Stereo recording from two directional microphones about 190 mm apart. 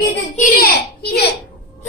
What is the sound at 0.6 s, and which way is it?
Speech, 55° left (ahead or behind).